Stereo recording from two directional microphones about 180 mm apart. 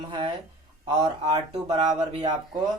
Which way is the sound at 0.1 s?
25° right (ahead or behind).